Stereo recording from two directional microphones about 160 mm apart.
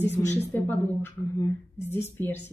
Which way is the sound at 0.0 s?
45° left (ahead or behind).